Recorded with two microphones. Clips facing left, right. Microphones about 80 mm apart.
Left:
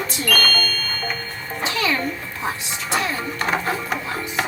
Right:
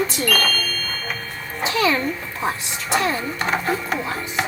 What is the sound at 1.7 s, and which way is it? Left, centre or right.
Speech, right.